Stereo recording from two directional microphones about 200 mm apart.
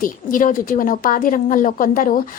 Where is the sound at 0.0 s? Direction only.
40° left (ahead or behind).